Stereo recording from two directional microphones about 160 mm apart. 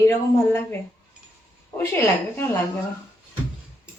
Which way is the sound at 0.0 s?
15° left (ahead or behind).